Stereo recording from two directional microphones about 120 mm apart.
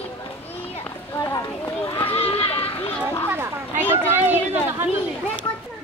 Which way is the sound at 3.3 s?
20° right (ahead or behind).